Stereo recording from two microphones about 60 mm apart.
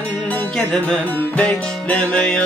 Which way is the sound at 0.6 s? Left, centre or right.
Centre.